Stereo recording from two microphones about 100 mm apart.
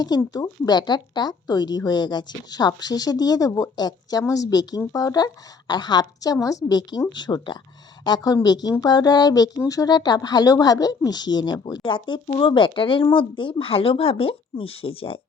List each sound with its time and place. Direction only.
0.2 s speech: 35° left (ahead or behind); by 15.2 s 70° left (ahead or behind)